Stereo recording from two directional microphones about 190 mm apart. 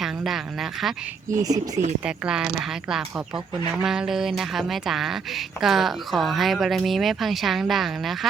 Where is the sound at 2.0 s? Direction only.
5° right (ahead or behind).